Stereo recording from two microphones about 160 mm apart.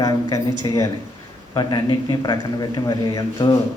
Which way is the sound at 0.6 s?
20° left (ahead or behind).